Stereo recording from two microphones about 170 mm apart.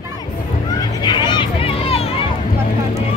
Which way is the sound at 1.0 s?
25° left (ahead or behind).